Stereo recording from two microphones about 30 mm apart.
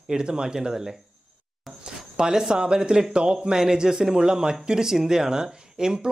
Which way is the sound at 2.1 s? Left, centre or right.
Right.